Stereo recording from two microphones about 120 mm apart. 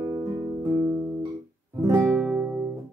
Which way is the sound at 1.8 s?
25° right (ahead or behind).